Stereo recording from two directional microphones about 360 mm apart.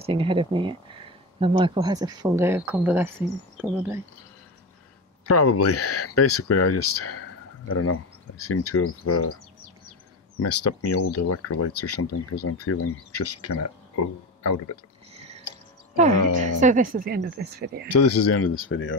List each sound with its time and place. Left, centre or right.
0.0 s speech: centre
5.3 s speech: left
10.4 s speech: left
16.5 s speech: right
17.8 s speech: left